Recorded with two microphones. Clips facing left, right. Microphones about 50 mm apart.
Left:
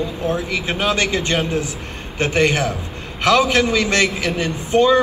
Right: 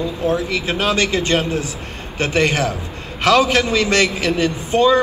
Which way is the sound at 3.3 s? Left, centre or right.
Left.